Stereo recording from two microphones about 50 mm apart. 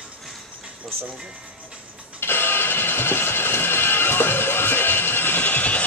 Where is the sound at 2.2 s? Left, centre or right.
Left.